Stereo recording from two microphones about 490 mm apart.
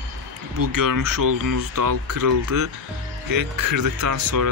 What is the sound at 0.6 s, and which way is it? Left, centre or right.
Speech, right.